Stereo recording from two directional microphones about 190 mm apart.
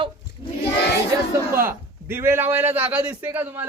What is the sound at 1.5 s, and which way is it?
A man's voice, 15° right (ahead or behind).